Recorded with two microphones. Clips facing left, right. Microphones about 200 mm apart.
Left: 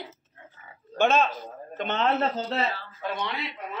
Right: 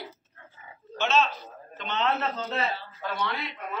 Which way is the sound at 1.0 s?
55° left (ahead or behind).